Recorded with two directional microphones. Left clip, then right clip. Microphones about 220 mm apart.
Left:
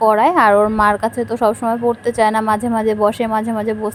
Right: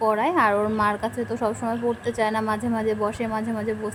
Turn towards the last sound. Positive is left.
turn(degrees=25)  # may be behind; listen again after turning